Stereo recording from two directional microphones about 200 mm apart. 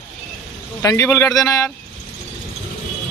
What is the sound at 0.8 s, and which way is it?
Speech, 15° left (ahead or behind).